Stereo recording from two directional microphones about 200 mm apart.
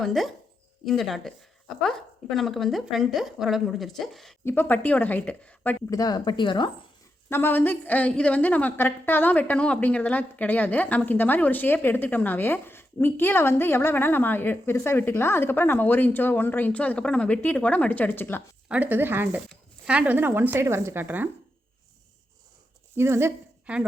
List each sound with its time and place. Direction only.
0.0 s a woman's voice: centre (ahead or behind)
5.9 s a woman's voice: 20° left (ahead or behind)
7.3 s a woman's voice: 10° left (ahead or behind)
18.7 s speech: 10° right (ahead or behind)
23.0 s speech: 10° right (ahead or behind)